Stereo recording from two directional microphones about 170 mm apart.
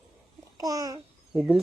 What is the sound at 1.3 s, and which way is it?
Speech, centre (ahead or behind).